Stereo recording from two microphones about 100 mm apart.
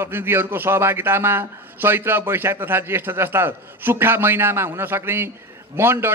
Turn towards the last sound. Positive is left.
turn(degrees=-25)  # may be behind; listen again after turning